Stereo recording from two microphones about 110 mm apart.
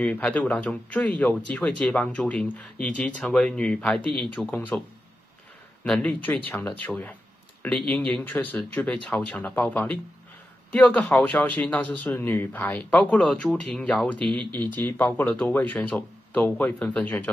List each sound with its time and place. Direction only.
0.0 s speech: 15° left (ahead or behind)
5.9 s speech: 10° left (ahead or behind)
14.2 s speech: 50° right (ahead or behind)
14.5 s speech: 15° left (ahead or behind)